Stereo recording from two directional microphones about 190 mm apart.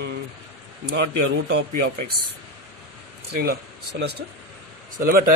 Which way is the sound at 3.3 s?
55° right (ahead or behind).